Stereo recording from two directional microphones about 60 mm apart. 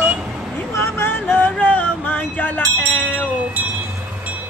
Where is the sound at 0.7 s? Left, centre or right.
Left.